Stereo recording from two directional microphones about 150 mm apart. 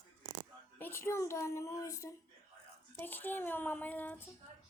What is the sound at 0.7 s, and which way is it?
A child's voice, 15° left (ahead or behind).